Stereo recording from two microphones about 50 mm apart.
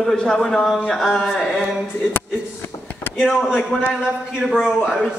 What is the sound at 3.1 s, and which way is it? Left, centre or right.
A man's voice, centre.